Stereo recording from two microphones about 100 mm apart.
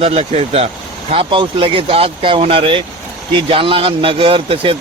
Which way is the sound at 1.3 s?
60° right (ahead or behind).